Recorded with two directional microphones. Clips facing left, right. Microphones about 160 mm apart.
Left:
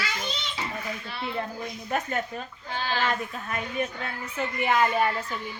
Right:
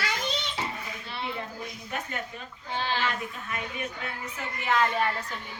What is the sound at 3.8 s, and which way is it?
Speech, 35° left (ahead or behind).